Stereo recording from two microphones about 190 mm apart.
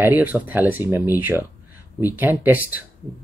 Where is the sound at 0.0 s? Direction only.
10° right (ahead or behind).